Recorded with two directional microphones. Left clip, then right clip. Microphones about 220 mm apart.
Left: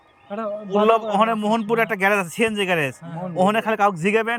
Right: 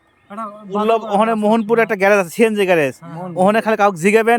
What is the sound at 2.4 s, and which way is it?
Speech, 20° right (ahead or behind).